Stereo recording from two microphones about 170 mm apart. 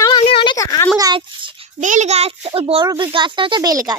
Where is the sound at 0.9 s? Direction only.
25° right (ahead or behind).